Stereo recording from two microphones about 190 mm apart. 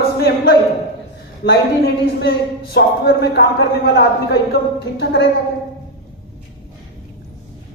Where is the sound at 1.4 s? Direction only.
55° left (ahead or behind).